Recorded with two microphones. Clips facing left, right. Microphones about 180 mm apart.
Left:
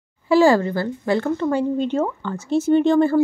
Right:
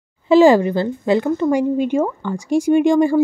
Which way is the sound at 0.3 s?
20° right (ahead or behind).